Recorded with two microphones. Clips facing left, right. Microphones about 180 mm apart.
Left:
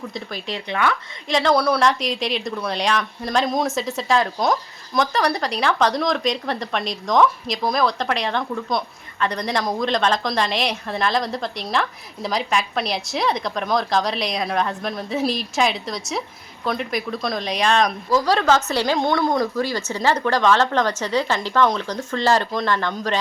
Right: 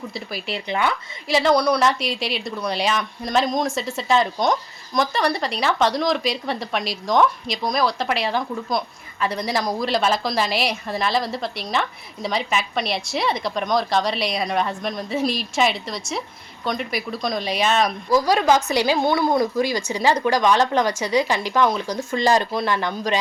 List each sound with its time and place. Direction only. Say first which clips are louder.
0.1 s speech: even; 5° right (ahead or behind)